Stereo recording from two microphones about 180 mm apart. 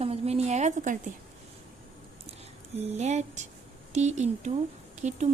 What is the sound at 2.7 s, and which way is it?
A woman's voice, 40° right (ahead or behind).